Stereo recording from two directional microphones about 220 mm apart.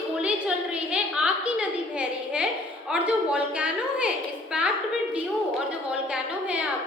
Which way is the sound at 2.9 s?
5° right (ahead or behind).